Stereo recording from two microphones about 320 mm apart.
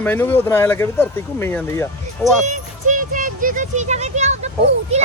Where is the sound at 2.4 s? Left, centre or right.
Right.